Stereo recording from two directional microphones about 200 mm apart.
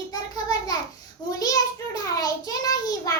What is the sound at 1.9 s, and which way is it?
Child singing, 20° left (ahead or behind).